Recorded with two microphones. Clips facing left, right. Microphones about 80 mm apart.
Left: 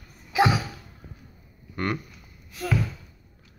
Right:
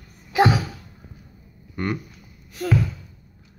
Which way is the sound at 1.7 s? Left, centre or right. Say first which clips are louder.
Right 2 dB; centre.